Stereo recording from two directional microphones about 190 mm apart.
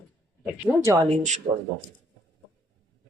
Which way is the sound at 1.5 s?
25° right (ahead or behind).